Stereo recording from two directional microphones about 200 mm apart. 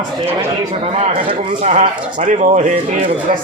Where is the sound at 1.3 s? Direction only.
35° right (ahead or behind).